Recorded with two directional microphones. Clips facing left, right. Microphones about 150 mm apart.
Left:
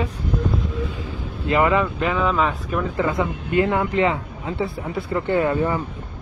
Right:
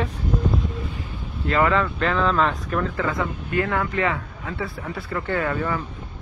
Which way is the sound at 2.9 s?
20° left (ahead or behind).